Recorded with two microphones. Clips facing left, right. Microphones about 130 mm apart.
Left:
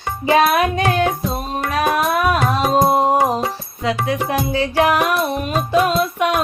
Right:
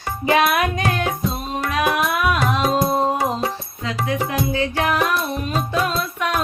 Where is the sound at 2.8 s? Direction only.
25° left (ahead or behind).